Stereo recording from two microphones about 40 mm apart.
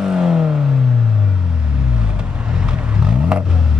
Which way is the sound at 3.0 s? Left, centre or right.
Right.